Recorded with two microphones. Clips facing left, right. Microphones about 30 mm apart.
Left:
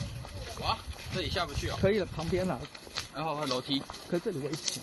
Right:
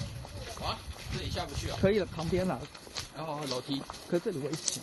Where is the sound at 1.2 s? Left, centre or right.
Left.